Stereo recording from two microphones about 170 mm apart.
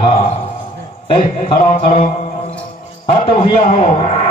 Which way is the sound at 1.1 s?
30° left (ahead or behind).